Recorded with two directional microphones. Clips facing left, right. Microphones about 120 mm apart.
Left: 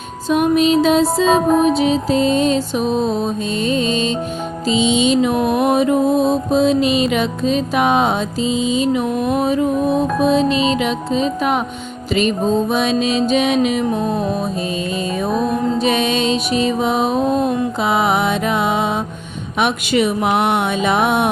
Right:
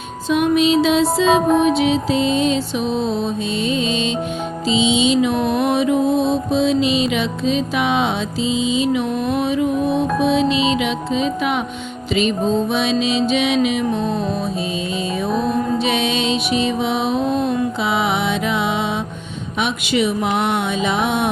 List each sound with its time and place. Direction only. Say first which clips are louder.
0.3 s music: left 1 dB; 40° left (ahead or behind)
12.7 s music: left 2 dB; 45° left (ahead or behind)
15.8 s music: left 2 dB; 45° left (ahead or behind)